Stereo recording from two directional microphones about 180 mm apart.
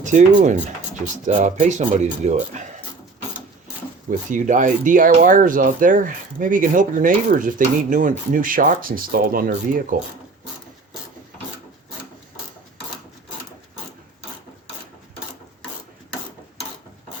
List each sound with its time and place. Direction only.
0.0 s speech: 45° right (ahead or behind)
4.3 s speech: 45° right (ahead or behind)